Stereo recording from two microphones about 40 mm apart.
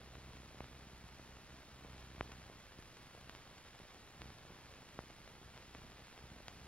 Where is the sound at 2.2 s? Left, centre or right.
Left.